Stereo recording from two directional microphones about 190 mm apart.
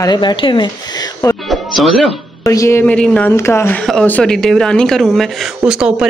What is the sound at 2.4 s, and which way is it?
Speech, 15° left (ahead or behind).